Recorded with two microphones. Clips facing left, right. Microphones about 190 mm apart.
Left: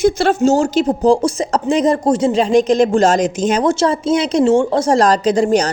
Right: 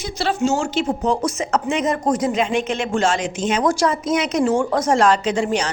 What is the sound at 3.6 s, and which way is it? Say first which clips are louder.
Speech: left 4 dB; 25° left (ahead or behind).